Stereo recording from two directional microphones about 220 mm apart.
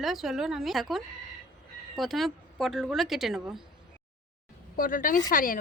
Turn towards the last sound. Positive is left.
turn(degrees=40)  # may be behind; listen again after turning